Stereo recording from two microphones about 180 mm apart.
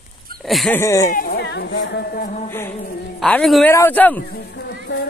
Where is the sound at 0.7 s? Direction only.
15° left (ahead or behind).